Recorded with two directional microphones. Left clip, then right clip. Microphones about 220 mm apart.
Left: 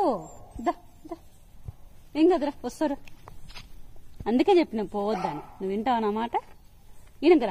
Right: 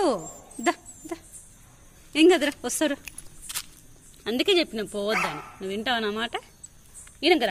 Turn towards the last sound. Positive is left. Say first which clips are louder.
# left 1 dB
turn(degrees=20)  # may be behind; listen again after turning